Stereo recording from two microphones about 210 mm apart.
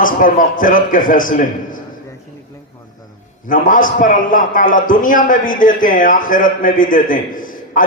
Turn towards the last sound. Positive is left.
turn(degrees=40)  # may be behind; listen again after turning